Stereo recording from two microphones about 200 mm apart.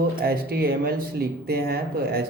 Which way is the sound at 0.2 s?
50° right (ahead or behind).